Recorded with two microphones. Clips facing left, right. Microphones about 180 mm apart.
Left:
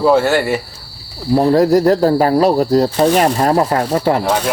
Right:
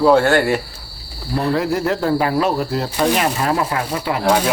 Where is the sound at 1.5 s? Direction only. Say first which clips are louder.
Left 9 dB; 40° left (ahead or behind).